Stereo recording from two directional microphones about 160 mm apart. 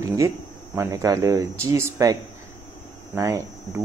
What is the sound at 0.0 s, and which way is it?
Speech, 20° right (ahead or behind).